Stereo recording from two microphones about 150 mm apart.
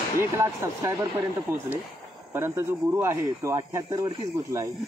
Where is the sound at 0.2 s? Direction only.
20° right (ahead or behind).